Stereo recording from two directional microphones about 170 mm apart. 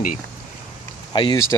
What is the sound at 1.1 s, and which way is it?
Speech, 25° left (ahead or behind).